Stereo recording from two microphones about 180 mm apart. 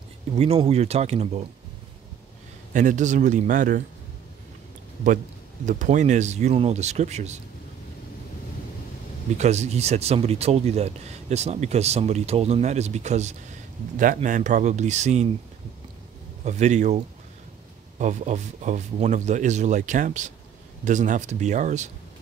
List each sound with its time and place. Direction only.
0.4 s speech: 35° right (ahead or behind)
2.7 s speech: 45° right (ahead or behind)
5.7 s speech: 45° right (ahead or behind)
9.4 s speech: 40° right (ahead or behind)
16.4 s speech: 40° right (ahead or behind)